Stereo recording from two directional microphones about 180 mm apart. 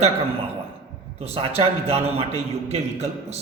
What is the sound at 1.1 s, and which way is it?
A man's voice, 35° right (ahead or behind).